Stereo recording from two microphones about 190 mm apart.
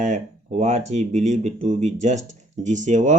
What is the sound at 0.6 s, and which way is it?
Speech, 35° right (ahead or behind).